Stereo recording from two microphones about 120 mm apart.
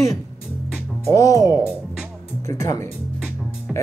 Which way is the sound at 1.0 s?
25° left (ahead or behind).